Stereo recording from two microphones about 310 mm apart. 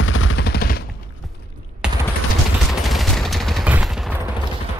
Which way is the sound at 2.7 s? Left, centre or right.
Centre.